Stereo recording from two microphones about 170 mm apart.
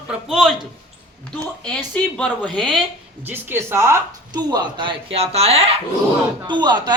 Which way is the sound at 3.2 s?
10° right (ahead or behind).